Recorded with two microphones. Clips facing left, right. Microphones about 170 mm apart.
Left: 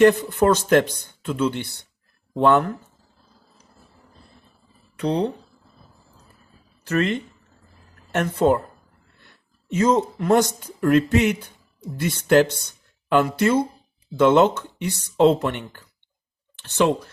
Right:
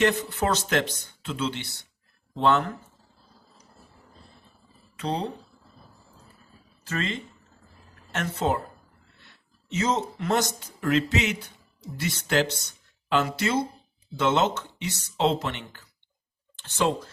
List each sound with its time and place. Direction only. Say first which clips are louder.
0.0 s speech: left 9 dB; 50° left (ahead or behind)
4.9 s speech: left 7 dB; 65° left (ahead or behind)
6.8 s speech: left 9 dB; 60° left (ahead or behind)
16.6 s speech: left 6 dB; 65° left (ahead or behind)